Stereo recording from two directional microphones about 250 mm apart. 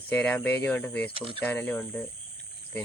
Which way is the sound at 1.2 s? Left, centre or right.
Right.